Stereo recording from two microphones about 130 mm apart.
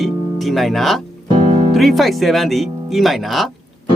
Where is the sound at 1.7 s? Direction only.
Centre (ahead or behind).